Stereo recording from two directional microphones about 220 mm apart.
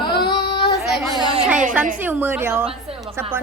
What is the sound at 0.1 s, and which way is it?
Child singing, 45° left (ahead or behind).